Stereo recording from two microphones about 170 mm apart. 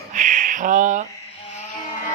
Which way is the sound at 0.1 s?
50° right (ahead or behind).